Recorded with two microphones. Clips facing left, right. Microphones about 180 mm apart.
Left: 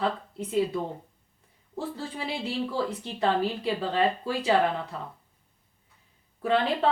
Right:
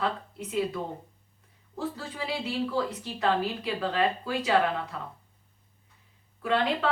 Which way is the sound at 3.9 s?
30° left (ahead or behind).